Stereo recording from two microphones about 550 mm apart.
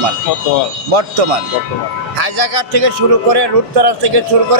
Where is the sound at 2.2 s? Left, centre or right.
Right.